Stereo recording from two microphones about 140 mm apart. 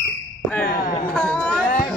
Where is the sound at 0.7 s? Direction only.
90° left.